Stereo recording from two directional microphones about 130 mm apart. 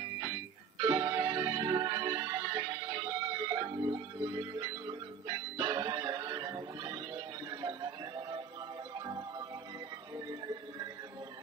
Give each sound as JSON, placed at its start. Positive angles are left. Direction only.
{"t": 0.8, "sound": "music", "side_deg": -25}